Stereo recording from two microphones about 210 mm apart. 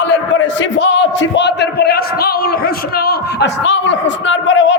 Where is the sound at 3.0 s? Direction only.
55° left (ahead or behind).